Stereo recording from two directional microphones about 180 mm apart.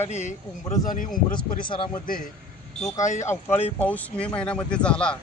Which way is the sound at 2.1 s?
50° left (ahead or behind).